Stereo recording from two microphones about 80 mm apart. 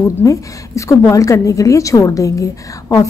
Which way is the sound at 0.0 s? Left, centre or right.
Left.